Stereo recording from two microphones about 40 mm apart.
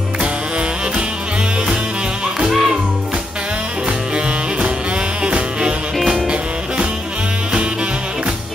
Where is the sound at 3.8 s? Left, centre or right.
Right.